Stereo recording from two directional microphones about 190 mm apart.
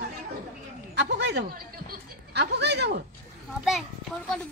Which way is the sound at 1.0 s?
65° right (ahead or behind).